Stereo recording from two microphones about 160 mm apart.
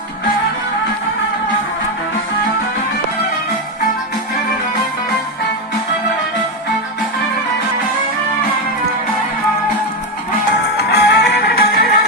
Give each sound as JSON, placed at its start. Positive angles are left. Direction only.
{"t": 10.8, "sound": "music", "side_deg": 90}